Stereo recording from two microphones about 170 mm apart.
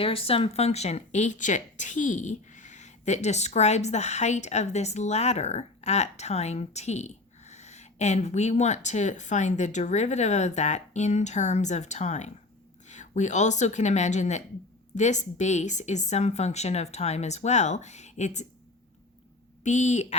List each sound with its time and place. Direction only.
0.0 s speech: 35° left (ahead or behind)
19.6 s speech: 45° left (ahead or behind)